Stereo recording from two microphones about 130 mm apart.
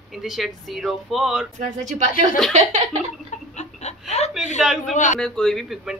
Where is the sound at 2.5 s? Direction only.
60° right (ahead or behind).